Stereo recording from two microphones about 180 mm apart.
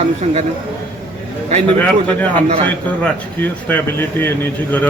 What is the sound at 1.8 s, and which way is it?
A man's voice, 10° left (ahead or behind).